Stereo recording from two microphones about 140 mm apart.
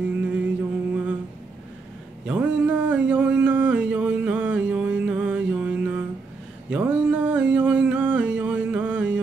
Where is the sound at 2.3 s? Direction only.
10° right (ahead or behind).